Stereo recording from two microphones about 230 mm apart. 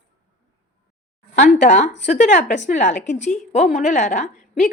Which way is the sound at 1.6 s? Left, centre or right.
Left.